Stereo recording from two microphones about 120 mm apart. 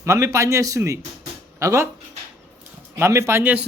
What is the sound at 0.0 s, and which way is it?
Speech, 25° right (ahead or behind).